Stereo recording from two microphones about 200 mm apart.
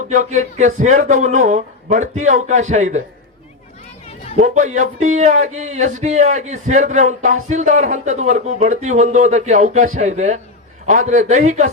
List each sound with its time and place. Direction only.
0.1 s speech: 35° right (ahead or behind)
4.7 s speech: 35° right (ahead or behind)